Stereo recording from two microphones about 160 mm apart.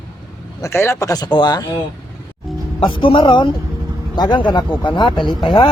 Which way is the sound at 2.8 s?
30° left (ahead or behind).